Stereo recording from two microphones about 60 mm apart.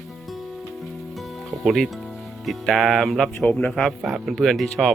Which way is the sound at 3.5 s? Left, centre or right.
Left.